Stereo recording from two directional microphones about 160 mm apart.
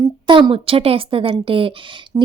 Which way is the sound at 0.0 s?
30° right (ahead or behind).